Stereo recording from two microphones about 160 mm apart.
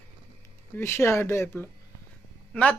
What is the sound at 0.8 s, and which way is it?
Speech, 15° left (ahead or behind).